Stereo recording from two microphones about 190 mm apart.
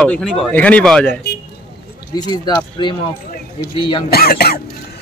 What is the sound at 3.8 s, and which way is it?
Speech, 25° left (ahead or behind).